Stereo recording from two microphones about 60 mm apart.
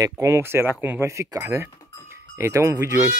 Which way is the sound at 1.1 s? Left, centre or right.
Right.